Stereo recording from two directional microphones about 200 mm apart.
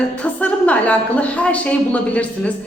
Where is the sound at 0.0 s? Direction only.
5° left (ahead or behind).